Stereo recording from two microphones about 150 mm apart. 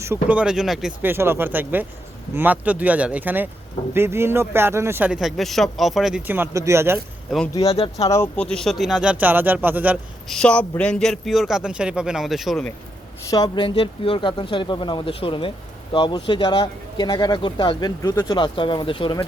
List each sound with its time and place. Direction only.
0.0 s speech: 15° right (ahead or behind)
1.0 s a man's voice: 15° right (ahead or behind)
7.3 s speech: centre (ahead or behind)
7.6 s speech: 40° left (ahead or behind)
8.0 s speech: 20° left (ahead or behind)
8.4 s a man's voice: 5° left (ahead or behind); by 10.0 s 10° right (ahead or behind)
10.2 s speech: 5° left (ahead or behind)
13.3 s speech: 30° left (ahead or behind)
18.3 s speech: 35° left (ahead or behind)